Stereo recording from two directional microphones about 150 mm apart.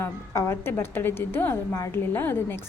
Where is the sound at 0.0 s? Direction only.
15° left (ahead or behind).